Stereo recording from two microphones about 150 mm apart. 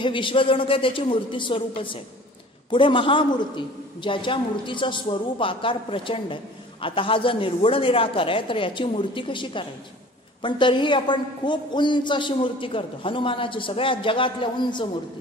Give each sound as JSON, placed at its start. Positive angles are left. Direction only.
{"t": 0.0, "sound": "a man's voice", "side_deg": 35}